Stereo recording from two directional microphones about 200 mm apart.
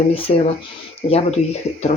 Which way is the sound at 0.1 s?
30° left (ahead or behind).